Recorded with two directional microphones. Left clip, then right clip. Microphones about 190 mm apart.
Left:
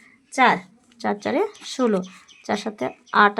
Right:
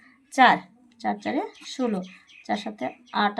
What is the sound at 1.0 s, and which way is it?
Speech, 30° left (ahead or behind).